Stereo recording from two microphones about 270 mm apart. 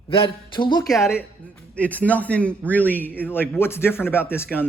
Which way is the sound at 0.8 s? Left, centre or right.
Centre.